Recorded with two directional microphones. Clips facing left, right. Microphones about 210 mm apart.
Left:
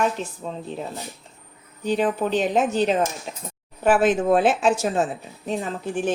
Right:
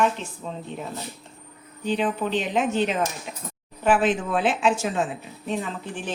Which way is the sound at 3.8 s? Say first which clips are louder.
Left 3 dB; 40° left (ahead or behind).